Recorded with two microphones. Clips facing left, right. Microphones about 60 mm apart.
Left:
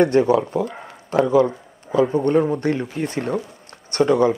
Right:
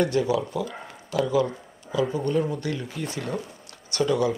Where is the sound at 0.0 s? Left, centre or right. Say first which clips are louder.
Left 7 dB; left.